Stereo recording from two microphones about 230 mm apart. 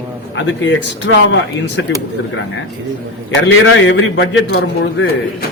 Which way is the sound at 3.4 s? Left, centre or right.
Left.